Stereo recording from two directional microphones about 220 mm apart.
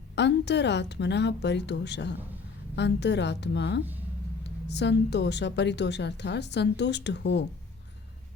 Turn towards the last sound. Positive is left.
turn(degrees=50)  # may be behind; listen again after turning